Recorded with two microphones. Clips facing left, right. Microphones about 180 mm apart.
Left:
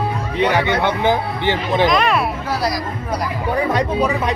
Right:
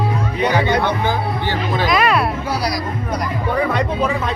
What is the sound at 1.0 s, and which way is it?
Music, 20° left (ahead or behind).